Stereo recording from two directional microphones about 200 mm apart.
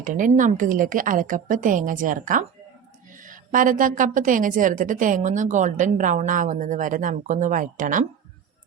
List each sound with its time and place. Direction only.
0.0 s a woman's voice: 40° right (ahead or behind)